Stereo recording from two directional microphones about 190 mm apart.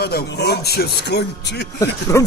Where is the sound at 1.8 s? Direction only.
15° left (ahead or behind).